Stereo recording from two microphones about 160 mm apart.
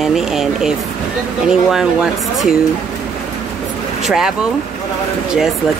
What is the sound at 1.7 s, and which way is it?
Speech, centre (ahead or behind).